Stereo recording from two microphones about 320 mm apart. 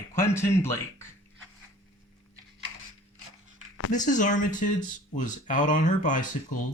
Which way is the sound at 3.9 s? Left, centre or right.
Left.